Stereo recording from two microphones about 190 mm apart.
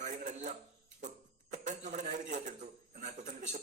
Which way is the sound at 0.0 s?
40° right (ahead or behind).